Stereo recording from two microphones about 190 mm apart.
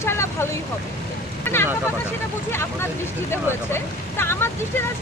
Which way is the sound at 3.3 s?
10° left (ahead or behind).